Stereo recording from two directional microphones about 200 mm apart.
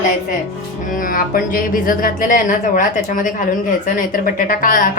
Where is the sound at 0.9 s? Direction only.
45° left (ahead or behind).